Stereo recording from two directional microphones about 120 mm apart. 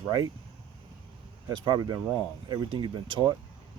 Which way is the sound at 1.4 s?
35° right (ahead or behind).